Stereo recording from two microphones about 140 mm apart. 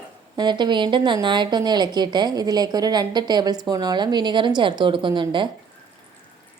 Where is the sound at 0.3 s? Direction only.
30° right (ahead or behind).